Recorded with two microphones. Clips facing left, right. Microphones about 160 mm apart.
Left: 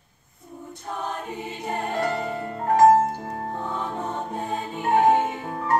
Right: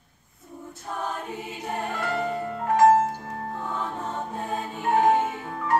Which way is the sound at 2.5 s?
40° left (ahead or behind).